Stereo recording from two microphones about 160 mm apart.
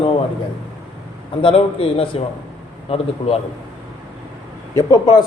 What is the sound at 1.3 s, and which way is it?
A man's voice, 35° left (ahead or behind).